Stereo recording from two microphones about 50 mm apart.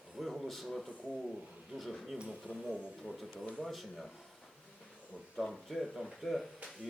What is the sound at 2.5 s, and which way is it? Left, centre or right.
Speech, left.